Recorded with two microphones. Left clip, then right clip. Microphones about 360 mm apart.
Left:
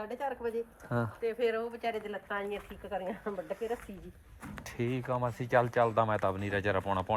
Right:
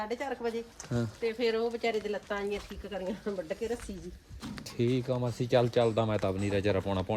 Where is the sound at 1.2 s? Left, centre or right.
Centre.